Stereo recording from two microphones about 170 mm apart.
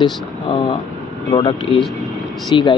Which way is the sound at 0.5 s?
25° left (ahead or behind).